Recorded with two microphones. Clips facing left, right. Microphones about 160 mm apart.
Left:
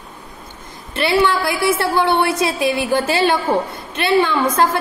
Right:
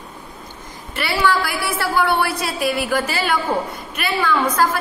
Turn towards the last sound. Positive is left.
turn(degrees=25)  # may be behind; listen again after turning